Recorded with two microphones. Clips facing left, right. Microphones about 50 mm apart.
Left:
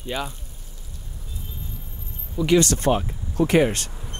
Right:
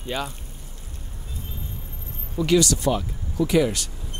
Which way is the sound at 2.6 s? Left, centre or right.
Left.